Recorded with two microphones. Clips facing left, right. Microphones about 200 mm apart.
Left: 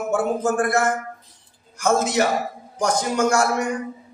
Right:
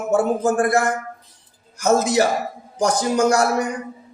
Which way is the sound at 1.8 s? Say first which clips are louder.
Right 3 dB; 35° right (ahead or behind).